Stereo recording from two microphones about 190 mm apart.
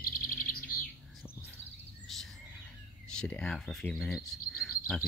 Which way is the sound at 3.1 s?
5° left (ahead or behind).